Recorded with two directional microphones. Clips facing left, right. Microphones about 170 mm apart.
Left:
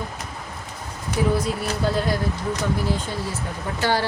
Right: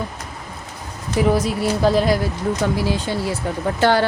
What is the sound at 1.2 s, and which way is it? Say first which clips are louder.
A woman's voice: right 5 dB; 90° right.